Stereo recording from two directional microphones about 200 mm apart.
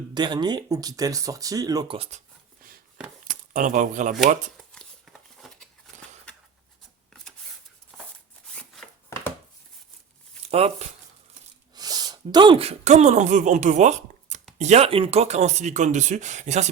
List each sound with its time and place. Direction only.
0.1 s speech: 20° right (ahead or behind)
3.2 s speech: 40° right (ahead or behind)
4.5 s a sound: 5° left (ahead or behind)
8.5 s a sound: 5° left (ahead or behind)
10.4 s speech: 30° right (ahead or behind)
11.7 s speech: 20° right (ahead or behind); by 16.6 s 35° right (ahead or behind)